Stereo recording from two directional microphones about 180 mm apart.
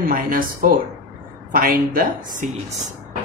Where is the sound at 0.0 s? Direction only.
50° right (ahead or behind).